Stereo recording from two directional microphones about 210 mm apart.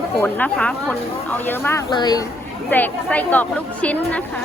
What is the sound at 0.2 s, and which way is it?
Speech, 10° left (ahead or behind).